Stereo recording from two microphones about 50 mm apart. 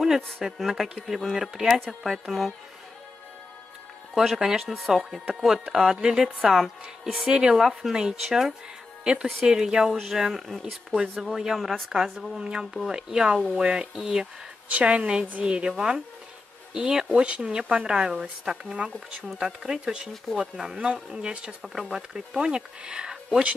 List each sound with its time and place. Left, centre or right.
0.0 s speech: centre
4.1 s speech: centre
7.2 s speech: centre
14.7 s speech: right; by 20.7 s centre
20.7 s speech: right